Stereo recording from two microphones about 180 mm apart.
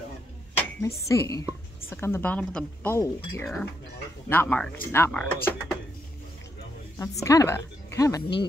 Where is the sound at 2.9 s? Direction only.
15° left (ahead or behind).